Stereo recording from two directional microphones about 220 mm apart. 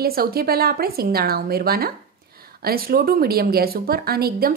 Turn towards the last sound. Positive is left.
turn(degrees=-45)  # may be behind; listen again after turning